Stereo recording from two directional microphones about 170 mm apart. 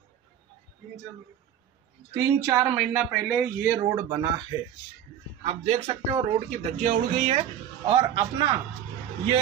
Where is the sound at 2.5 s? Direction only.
15° right (ahead or behind).